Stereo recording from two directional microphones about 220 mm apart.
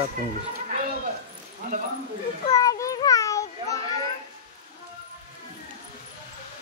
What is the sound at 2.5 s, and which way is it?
Children playing, 15° left (ahead or behind).